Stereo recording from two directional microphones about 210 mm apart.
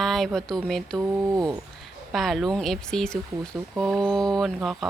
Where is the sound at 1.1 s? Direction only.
15° right (ahead or behind).